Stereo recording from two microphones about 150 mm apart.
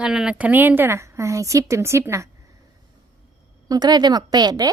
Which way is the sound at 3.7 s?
25° right (ahead or behind).